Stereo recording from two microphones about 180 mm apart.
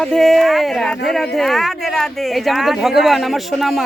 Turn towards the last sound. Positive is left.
turn(degrees=0)  # may be behind; listen again after turning